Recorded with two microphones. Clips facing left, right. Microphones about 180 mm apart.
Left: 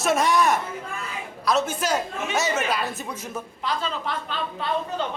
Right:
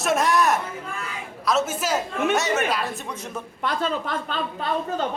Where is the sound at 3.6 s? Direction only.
50° right (ahead or behind).